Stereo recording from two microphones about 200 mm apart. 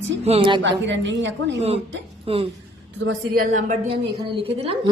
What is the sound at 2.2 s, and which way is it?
Speech, 30° right (ahead or behind).